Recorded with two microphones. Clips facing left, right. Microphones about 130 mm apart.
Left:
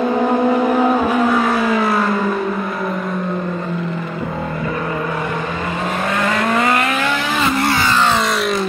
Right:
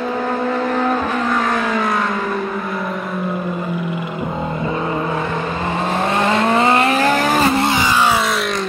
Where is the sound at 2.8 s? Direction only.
Centre (ahead or behind); by 5.2 s 25° right (ahead or behind).